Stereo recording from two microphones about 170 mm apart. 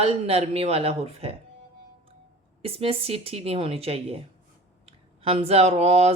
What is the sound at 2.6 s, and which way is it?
A man's voice, 35° right (ahead or behind).